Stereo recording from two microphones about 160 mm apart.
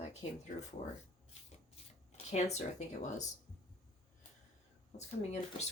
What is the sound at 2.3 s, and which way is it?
Speech, 45° left (ahead or behind).